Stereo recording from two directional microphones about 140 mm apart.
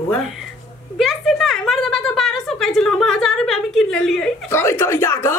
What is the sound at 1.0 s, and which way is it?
Speech, centre (ahead or behind).